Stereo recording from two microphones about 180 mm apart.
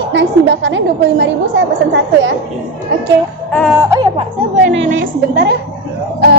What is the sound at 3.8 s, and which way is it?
Speech, 20° right (ahead or behind).